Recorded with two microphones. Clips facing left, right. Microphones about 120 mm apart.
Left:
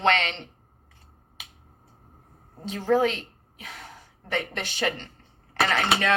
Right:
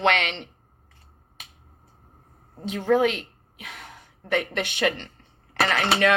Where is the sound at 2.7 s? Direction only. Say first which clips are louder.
Right 2 dB; 35° left (ahead or behind).